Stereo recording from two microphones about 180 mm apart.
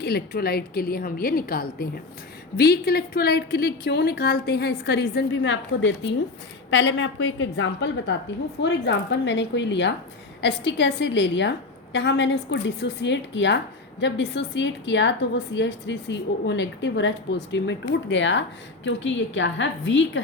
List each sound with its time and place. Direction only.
0.0 s a woman's voice: 60° left (ahead or behind); by 8.1 s 90° left
8.6 s a woman's voice: 75° left (ahead or behind)